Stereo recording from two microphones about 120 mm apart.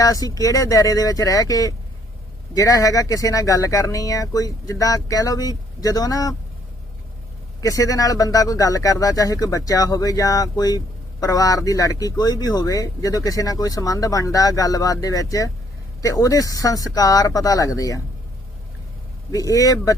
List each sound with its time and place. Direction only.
0.0 s speech: 30° left (ahead or behind)
7.6 s speech: 30° left (ahead or behind)
19.3 s speech: 30° left (ahead or behind)